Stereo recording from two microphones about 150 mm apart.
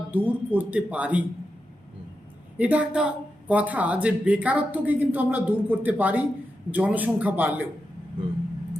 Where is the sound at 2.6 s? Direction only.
10° right (ahead or behind).